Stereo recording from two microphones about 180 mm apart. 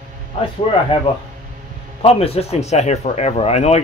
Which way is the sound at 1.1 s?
30° left (ahead or behind).